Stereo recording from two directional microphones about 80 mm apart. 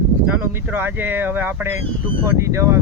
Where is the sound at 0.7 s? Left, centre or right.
Right.